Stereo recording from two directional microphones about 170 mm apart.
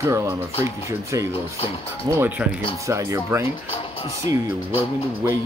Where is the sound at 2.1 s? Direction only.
25° right (ahead or behind).